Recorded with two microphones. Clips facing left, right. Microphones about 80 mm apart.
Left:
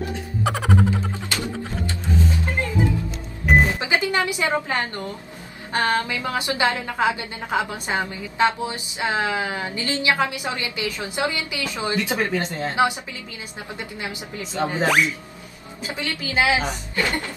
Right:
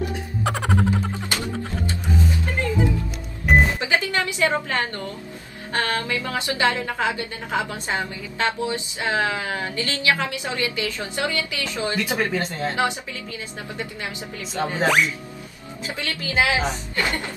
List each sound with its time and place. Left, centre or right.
0.4 s music: centre
0.8 s music: right
3.5 s music: centre
3.8 s a woman's voice: left
13.9 s a woman's voice: left
14.9 s speech: centre
15.8 s a woman's voice: left
16.9 s music: left